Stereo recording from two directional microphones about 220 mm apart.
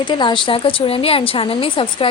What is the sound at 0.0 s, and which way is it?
A woman's voice, 20° left (ahead or behind).